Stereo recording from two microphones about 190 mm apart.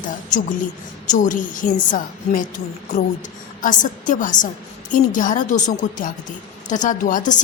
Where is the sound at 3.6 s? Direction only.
40° left (ahead or behind).